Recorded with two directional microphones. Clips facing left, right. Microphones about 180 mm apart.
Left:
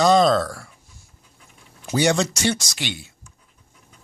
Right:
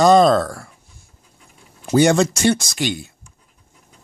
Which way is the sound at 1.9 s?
50° right (ahead or behind).